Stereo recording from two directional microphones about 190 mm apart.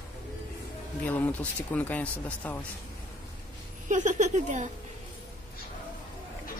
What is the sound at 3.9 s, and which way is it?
Speech, 40° right (ahead or behind).